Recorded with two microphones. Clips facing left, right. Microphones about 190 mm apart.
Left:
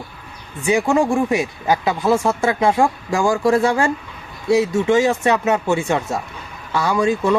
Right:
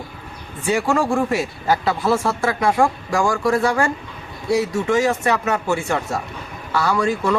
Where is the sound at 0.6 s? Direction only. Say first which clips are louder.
Left 3 dB; 15° left (ahead or behind).